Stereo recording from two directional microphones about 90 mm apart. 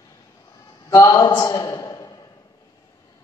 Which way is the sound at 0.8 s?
35° left (ahead or behind).